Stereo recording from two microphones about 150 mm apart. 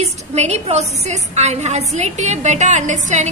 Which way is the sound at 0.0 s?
50° right (ahead or behind).